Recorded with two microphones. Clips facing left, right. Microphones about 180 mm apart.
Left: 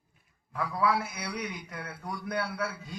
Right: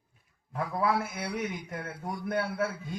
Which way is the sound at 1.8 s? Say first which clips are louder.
Right 2 dB; 25° right (ahead or behind).